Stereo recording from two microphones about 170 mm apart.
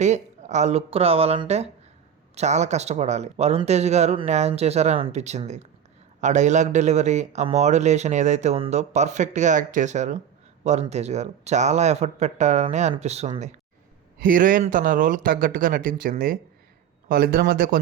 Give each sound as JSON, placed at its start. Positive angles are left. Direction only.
{"t": 0.0, "sound": "a man's voice", "side_deg": -45}
{"t": 14.2, "sound": "a man's voice", "side_deg": -55}